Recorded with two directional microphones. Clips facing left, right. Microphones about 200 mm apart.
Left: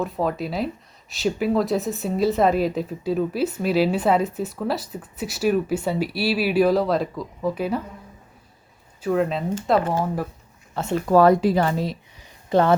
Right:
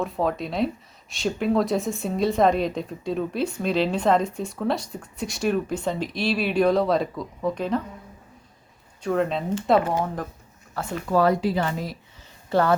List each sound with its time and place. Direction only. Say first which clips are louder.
0.0 s a woman's voice: left 1 dB; centre (ahead or behind)
9.0 s a woman's voice: left 2 dB; 5° left (ahead or behind)
10.8 s speech: left 3 dB; 20° left (ahead or behind)
11.1 s speech: left 5 dB; 50° left (ahead or behind)
12.2 s a sound: left 3 dB; 20° left (ahead or behind)